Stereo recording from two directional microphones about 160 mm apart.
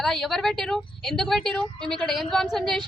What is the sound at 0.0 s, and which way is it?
A woman's voice, centre (ahead or behind).